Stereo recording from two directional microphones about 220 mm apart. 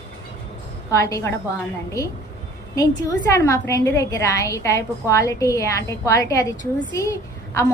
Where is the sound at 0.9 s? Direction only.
15° left (ahead or behind).